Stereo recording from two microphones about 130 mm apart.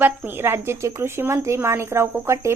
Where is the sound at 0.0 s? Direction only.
15° right (ahead or behind).